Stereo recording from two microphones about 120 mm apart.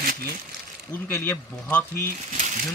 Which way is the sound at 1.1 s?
20° left (ahead or behind).